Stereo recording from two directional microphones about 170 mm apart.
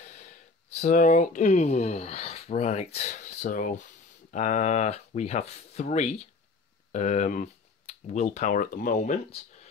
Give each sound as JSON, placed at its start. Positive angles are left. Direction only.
{"t": 0.7, "sound": "speech", "side_deg": 45}